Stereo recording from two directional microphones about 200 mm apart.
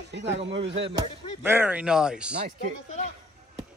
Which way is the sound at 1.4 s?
10° right (ahead or behind).